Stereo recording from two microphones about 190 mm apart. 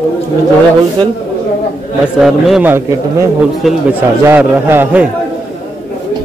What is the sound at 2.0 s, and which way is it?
A man's voice, 5° right (ahead or behind).